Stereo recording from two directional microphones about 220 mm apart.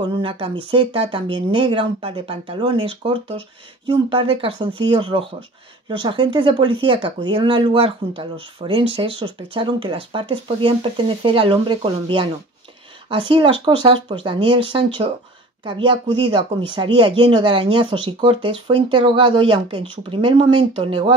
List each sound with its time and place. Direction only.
0.0 s speech: 25° right (ahead or behind)